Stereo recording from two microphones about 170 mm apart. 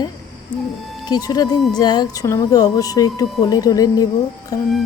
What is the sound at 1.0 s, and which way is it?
Speech, 25° left (ahead or behind).